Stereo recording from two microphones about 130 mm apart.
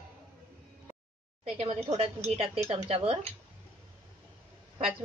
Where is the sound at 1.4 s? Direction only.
60° right (ahead or behind).